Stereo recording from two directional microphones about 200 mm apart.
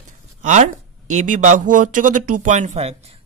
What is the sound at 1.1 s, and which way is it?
Speech, 35° right (ahead or behind).